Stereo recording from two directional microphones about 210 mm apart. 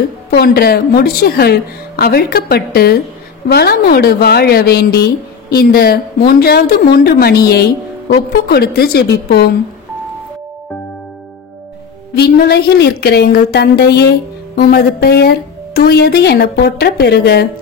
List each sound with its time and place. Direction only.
0.3 s speech: 45° left (ahead or behind)
12.2 s speech: 50° left (ahead or behind)